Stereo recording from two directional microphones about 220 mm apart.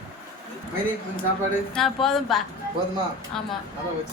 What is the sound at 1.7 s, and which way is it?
Speech, centre (ahead or behind).